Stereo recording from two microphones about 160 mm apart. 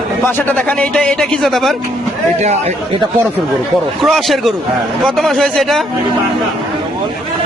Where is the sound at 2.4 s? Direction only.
45° right (ahead or behind).